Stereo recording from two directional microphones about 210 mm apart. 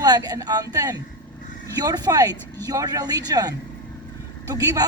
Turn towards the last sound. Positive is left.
turn(degrees=-15)  # may be behind; listen again after turning